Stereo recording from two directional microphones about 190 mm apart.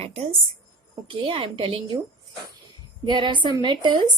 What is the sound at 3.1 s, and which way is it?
A woman's voice, 25° right (ahead or behind).